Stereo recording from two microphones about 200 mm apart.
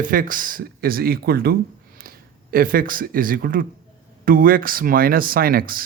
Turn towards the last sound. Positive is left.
turn(degrees=-45)  # may be behind; listen again after turning